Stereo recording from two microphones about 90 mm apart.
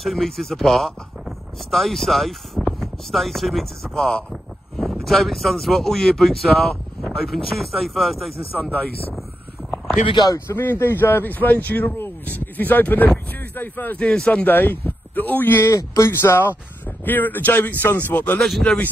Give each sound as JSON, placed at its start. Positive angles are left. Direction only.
{"t": 0.0, "sound": "speech", "side_deg": 0}
{"t": 10.5, "sound": "speech", "side_deg": 25}
{"t": 15.7, "sound": "speech", "side_deg": 35}
{"t": 18.4, "sound": "speech", "side_deg": 5}